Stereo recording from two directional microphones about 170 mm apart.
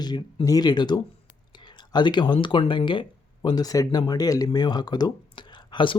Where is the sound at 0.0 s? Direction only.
25° left (ahead or behind).